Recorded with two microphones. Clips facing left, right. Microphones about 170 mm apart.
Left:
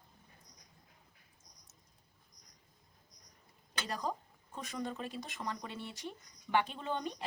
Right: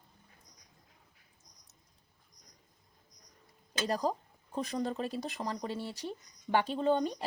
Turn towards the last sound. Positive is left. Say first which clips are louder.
# right 9 dB
turn(degrees=-35)  # may be behind; listen again after turning